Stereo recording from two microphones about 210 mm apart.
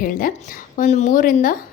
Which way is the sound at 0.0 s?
40° left (ahead or behind).